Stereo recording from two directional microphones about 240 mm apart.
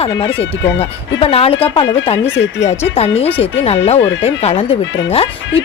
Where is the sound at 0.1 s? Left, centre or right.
Centre.